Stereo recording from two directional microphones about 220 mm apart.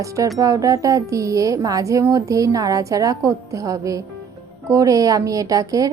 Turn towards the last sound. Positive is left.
turn(degrees=-15)  # may be behind; listen again after turning